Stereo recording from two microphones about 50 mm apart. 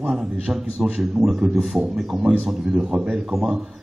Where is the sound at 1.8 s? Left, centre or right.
Centre.